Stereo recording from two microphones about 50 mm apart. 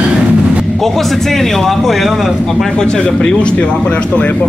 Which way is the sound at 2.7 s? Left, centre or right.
Centre.